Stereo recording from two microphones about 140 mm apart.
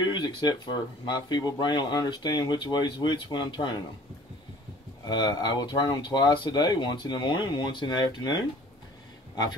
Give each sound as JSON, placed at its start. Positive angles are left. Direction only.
{"t": 0.1, "sound": "speech", "side_deg": 30}
{"t": 5.0, "sound": "speech", "side_deg": 30}